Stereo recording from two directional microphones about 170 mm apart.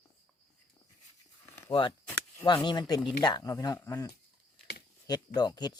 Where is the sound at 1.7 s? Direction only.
30° left (ahead or behind).